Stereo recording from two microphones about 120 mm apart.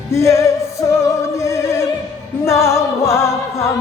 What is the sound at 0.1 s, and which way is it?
Music, 25° left (ahead or behind).